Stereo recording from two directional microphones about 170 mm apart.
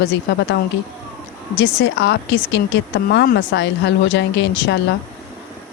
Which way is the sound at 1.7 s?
90° left.